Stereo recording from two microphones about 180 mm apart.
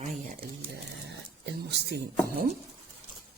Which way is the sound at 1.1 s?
70° right (ahead or behind).